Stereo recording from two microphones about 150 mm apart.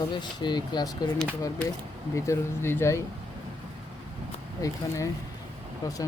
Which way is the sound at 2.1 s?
20° left (ahead or behind).